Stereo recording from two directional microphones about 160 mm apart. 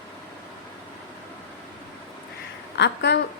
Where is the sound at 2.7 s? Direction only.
90° left.